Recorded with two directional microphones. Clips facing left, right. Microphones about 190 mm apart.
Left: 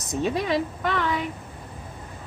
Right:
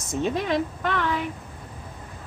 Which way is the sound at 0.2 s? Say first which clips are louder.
Even; 5° left (ahead or behind).